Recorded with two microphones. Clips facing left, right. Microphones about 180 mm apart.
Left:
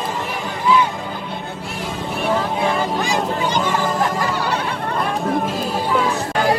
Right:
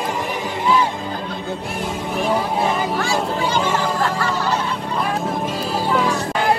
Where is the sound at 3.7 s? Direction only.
15° left (ahead or behind).